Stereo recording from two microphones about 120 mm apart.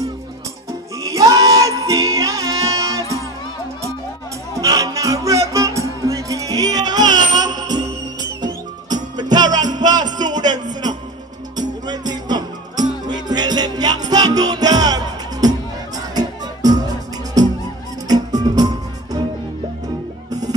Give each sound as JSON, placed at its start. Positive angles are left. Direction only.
{"t": 1.0, "sound": "music", "side_deg": -30}
{"t": 4.6, "sound": "music", "side_deg": -30}